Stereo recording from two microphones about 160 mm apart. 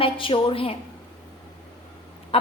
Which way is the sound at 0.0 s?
30° left (ahead or behind).